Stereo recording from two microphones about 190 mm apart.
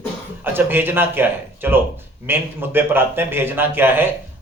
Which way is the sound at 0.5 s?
10° right (ahead or behind).